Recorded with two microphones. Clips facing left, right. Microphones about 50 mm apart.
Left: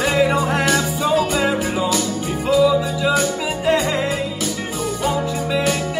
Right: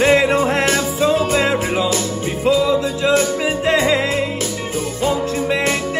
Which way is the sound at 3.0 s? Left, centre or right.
Right.